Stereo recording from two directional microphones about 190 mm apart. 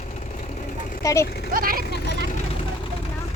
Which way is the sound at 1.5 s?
50° right (ahead or behind).